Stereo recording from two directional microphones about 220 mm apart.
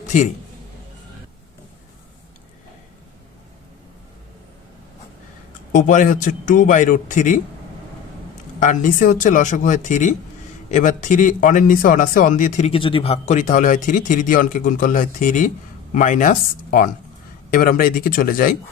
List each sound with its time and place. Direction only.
5.7 s a man's voice: 35° left (ahead or behind)
8.5 s a man's voice: 35° left (ahead or behind)